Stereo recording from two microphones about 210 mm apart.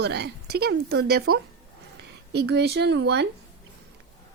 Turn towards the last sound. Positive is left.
turn(degrees=-55)  # may be behind; listen again after turning